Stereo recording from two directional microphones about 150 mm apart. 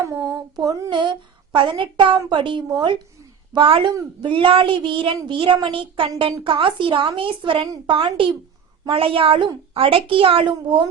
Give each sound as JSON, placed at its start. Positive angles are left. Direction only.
{"t": 0.1, "sound": "child singing", "side_deg": -25}
{"t": 1.5, "sound": "speech", "side_deg": -35}